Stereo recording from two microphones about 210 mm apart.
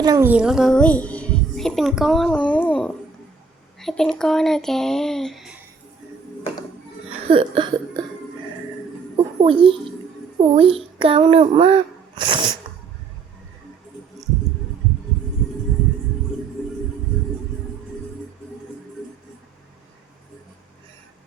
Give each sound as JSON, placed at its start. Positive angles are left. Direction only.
{"t": 0.0, "sound": "a child's voice", "side_deg": -15}
{"t": 7.3, "sound": "cough", "side_deg": -25}
{"t": 9.4, "sound": "cough", "side_deg": -25}
{"t": 10.4, "sound": "speech", "side_deg": -30}